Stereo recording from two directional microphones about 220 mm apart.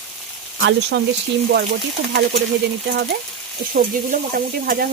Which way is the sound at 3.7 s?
40° right (ahead or behind).